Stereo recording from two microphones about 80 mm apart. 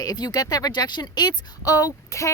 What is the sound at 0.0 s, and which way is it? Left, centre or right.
Speech, left.